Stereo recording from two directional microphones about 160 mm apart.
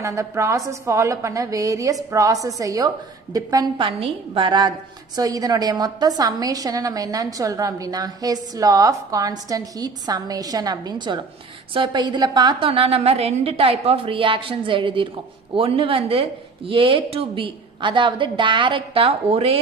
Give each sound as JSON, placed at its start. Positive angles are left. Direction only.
{"t": 0.0, "sound": "a woman's voice", "side_deg": -20}